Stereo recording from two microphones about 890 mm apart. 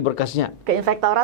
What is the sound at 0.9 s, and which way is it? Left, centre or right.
Speech, right.